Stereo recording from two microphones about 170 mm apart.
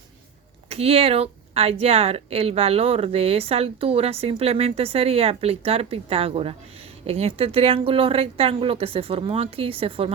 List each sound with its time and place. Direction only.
0.7 s speech: 35° right (ahead or behind)